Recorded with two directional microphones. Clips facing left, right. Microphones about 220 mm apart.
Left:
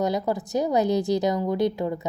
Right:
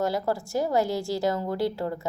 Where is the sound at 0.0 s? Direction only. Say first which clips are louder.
Left 2 dB; 20° left (ahead or behind).